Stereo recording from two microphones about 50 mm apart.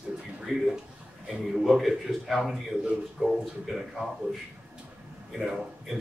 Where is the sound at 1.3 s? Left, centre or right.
Centre.